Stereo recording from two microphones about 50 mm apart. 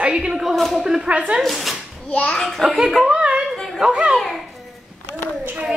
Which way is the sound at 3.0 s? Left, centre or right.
Right.